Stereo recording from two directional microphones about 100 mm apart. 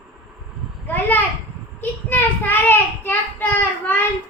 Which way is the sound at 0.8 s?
20° left (ahead or behind).